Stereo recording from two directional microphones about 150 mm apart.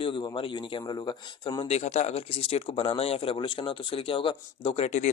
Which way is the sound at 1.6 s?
50° left (ahead or behind).